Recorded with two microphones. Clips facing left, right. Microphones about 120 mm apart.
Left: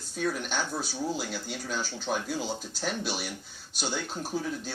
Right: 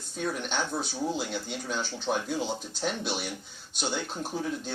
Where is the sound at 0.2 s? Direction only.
25° right (ahead or behind).